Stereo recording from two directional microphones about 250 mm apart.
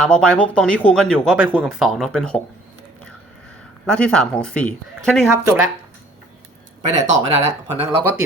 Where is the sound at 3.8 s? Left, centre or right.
Centre.